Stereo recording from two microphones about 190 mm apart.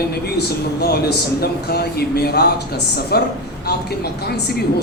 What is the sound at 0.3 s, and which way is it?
Speech, 55° left (ahead or behind).